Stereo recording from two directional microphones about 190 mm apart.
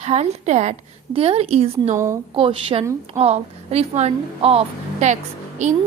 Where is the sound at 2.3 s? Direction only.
30° right (ahead or behind).